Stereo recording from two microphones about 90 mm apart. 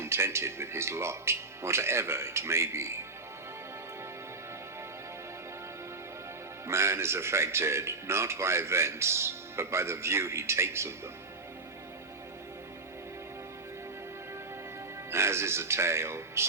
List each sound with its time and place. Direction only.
0.0 s a man's voice: 30° right (ahead or behind)
6.7 s a man's voice: 30° right (ahead or behind)
15.1 s speech: 30° right (ahead or behind)